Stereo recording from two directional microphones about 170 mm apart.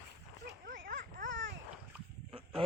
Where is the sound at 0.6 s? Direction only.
60° right (ahead or behind).